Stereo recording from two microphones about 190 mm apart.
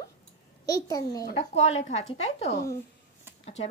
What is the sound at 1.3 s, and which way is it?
Speech, 35° left (ahead or behind).